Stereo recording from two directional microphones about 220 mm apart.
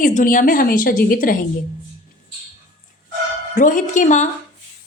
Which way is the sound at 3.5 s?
35° left (ahead or behind).